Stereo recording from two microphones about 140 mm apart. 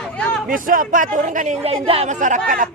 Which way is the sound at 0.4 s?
80° right.